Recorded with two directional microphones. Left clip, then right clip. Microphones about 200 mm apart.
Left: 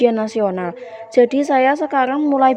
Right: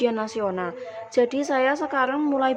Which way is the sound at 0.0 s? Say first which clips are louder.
Left 8 dB; 30° left (ahead or behind).